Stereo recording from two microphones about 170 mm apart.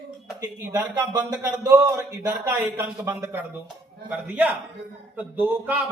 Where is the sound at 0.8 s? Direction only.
10° right (ahead or behind).